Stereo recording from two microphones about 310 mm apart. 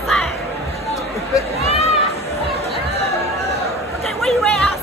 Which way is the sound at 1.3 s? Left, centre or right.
Centre.